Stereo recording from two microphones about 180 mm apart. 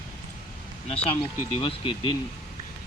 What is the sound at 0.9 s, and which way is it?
A man's voice, 30° left (ahead or behind).